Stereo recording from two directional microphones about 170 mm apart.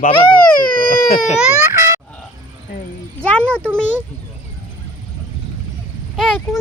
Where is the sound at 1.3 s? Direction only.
15° right (ahead or behind).